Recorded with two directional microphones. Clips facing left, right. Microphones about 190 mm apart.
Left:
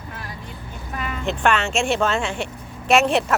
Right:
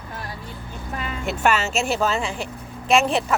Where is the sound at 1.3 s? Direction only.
5° right (ahead or behind).